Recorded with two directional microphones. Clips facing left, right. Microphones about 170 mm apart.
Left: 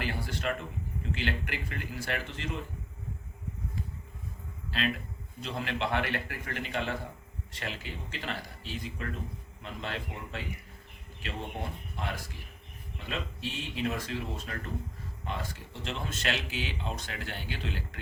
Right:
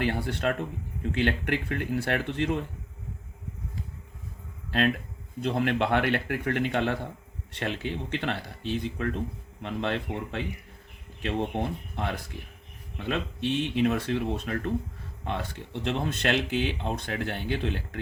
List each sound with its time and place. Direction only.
0.0 s speech: 60° right (ahead or behind)
5.4 s a man's voice: 55° right (ahead or behind)